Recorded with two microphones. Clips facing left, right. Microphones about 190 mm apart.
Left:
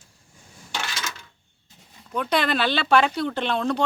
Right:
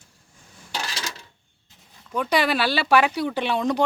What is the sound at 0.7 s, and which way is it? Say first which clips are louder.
Coin: even; 35° right (ahead or behind).